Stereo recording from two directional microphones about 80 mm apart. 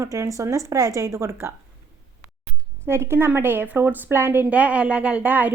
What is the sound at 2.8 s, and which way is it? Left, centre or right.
A woman's voice, right.